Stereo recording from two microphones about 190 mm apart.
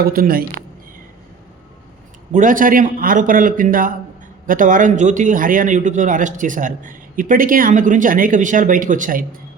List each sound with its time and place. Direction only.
0.0 s a man's voice: 50° right (ahead or behind)
2.3 s a man's voice: 45° right (ahead or behind)